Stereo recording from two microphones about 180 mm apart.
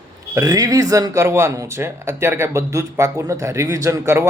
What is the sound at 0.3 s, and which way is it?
Speech, 20° right (ahead or behind).